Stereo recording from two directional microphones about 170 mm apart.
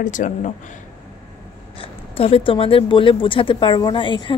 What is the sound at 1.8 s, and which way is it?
Speech, 35° left (ahead or behind).